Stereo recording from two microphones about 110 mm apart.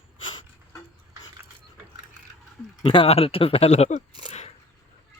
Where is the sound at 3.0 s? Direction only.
65° left (ahead or behind); by 4.0 s 80° left.